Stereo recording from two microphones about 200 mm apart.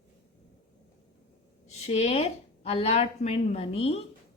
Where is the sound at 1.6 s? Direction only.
35° left (ahead or behind).